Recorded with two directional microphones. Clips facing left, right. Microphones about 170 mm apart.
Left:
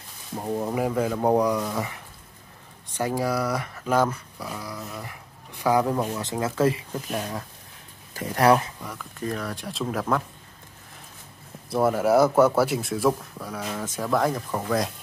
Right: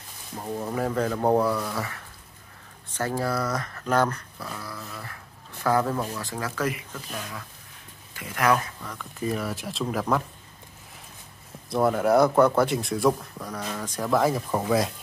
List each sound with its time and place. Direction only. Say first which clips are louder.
0.4 s speech: left 3 dB; 15° left (ahead or behind)
9.2 s speech: right 2 dB; 5° right (ahead or behind)
11.7 s speech: left 1 dB; 5° left (ahead or behind)